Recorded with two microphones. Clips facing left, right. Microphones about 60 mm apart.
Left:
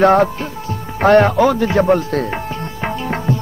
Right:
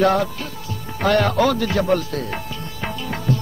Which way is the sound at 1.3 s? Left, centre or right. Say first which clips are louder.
Left 5 dB; centre.